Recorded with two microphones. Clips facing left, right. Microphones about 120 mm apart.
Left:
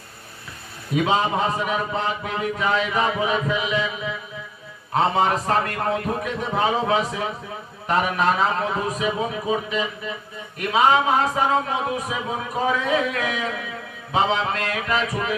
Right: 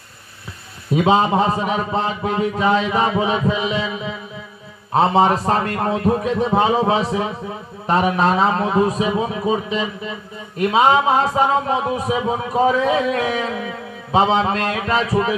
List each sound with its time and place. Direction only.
1.0 s speech: 30° right (ahead or behind)